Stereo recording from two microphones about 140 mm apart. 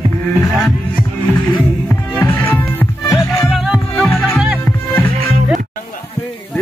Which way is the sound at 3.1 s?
Centre (ahead or behind).